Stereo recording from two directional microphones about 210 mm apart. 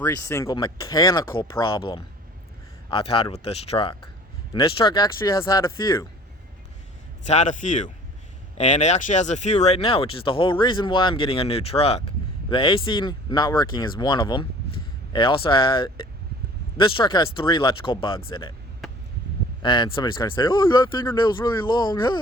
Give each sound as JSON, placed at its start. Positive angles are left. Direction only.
{"t": 0.0, "sound": "speech", "side_deg": 15}
{"t": 7.3, "sound": "a man's voice", "side_deg": 35}
{"t": 18.8, "sound": "a sound", "side_deg": 0}
{"t": 19.6, "sound": "speech", "side_deg": 20}